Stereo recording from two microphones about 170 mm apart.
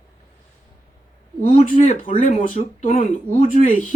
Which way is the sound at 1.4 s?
45° left (ahead or behind).